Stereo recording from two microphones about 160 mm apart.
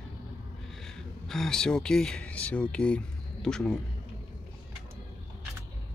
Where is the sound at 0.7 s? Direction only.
5° left (ahead or behind).